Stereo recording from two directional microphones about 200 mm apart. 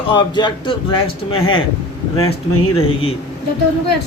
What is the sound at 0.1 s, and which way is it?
Speech, 20° left (ahead or behind).